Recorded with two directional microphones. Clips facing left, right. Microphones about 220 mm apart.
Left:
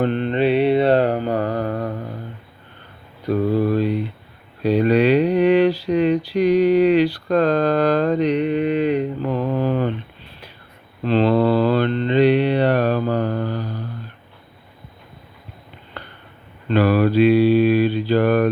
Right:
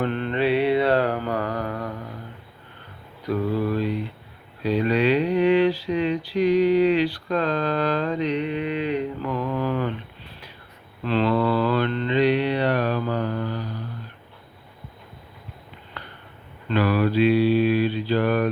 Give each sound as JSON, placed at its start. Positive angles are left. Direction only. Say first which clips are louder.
{"t": 0.0, "sound": "mantra", "louder": "left 5 dB", "side_deg": 25}
{"t": 3.2, "sound": "mantra", "louder": "left 5 dB", "side_deg": 30}
{"t": 3.5, "sound": "mantra", "louder": "left 6 dB", "side_deg": 50}
{"t": 4.8, "sound": "a sound", "louder": "left 5 dB", "side_deg": 40}
{"t": 6.6, "sound": "mantra", "louder": "left 4 dB", "side_deg": 45}
{"t": 9.2, "sound": "mantra", "louder": "left 5 dB", "side_deg": 30}
{"t": 11.0, "sound": "mantra", "louder": "left 5 dB", "side_deg": 30}
{"t": 12.6, "sound": "mantra", "louder": "left 5 dB", "side_deg": 50}
{"t": 16.8, "sound": "mantra", "louder": "left 5 dB", "side_deg": 45}
{"t": 18.1, "sound": "a sound", "louder": "left 5 dB", "side_deg": 50}